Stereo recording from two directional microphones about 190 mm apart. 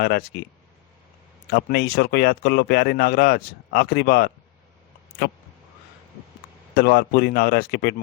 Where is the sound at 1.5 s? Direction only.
60° left (ahead or behind).